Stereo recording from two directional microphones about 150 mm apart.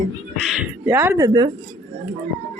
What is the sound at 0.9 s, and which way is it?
Speech, 15° right (ahead or behind).